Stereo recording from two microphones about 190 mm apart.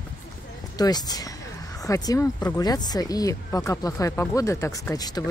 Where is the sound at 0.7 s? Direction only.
20° left (ahead or behind).